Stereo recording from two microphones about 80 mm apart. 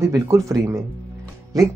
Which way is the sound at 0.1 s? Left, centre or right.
Right.